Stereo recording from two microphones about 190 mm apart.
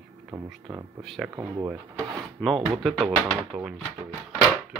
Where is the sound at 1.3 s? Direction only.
15° right (ahead or behind).